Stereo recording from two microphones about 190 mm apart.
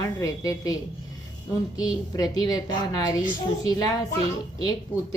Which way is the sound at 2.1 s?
20° left (ahead or behind).